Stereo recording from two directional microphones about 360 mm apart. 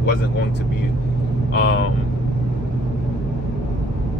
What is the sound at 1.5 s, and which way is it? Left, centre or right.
Speech, left.